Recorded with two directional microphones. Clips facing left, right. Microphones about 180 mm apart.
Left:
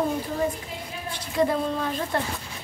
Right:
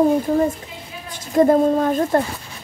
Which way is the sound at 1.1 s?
45° right (ahead or behind).